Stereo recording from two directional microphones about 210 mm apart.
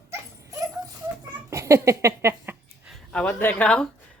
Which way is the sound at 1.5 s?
15° right (ahead or behind).